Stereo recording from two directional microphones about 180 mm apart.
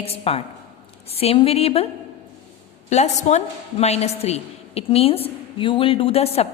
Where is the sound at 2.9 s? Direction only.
40° left (ahead or behind).